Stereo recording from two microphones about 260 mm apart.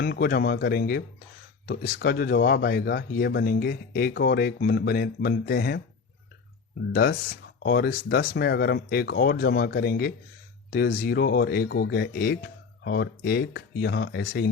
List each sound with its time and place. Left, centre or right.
0.0 s speech: left
6.9 s speech: left